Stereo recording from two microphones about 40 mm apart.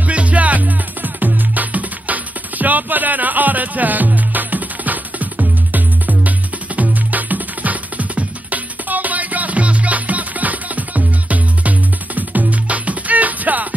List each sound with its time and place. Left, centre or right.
0.0 s music: right